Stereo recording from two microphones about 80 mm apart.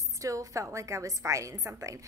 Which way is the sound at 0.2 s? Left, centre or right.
Right.